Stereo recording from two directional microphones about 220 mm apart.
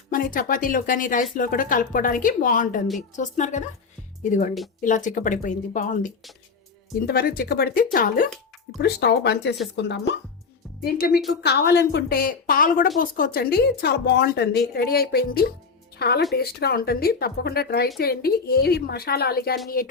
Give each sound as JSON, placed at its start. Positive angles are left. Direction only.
{"t": 0.1, "sound": "speech", "side_deg": 40}
{"t": 7.1, "sound": "speech", "side_deg": 45}
{"t": 10.8, "sound": "speech", "side_deg": 45}